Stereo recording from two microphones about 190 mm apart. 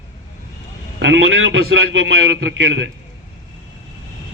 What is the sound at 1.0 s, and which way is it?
A man's voice, 85° right.